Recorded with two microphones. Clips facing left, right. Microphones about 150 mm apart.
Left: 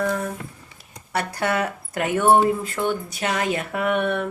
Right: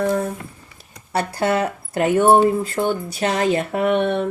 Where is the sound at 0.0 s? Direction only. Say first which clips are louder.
Right 4 dB; 30° right (ahead or behind).